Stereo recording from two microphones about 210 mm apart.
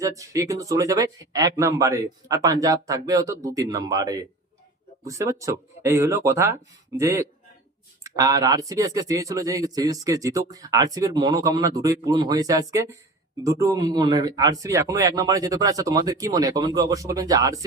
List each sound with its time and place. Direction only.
0.0 s speech: 15° right (ahead or behind)